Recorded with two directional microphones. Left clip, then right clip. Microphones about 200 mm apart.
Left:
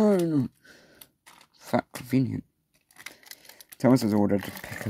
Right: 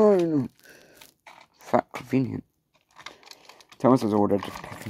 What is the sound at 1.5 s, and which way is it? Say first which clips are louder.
Shuffling cards: right 4 dB; 60° left (ahead or behind).